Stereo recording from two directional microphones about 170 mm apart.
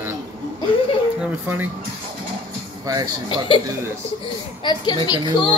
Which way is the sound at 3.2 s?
30° left (ahead or behind).